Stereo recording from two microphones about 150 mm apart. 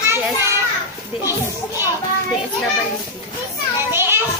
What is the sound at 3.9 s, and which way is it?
Children playing, 15° right (ahead or behind).